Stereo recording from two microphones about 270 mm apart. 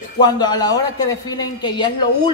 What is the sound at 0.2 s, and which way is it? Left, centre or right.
Speech, centre.